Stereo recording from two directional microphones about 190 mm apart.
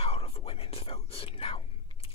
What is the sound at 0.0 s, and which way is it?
Whispering, 30° left (ahead or behind).